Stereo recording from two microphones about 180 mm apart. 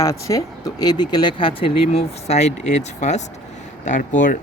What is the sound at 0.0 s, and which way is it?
Speech, 20° left (ahead or behind).